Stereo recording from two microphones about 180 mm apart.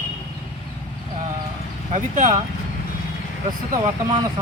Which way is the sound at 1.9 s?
45° right (ahead or behind).